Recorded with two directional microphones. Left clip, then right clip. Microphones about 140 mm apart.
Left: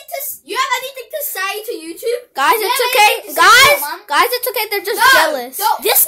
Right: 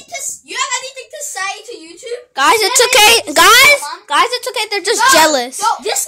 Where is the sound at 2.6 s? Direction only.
40° right (ahead or behind).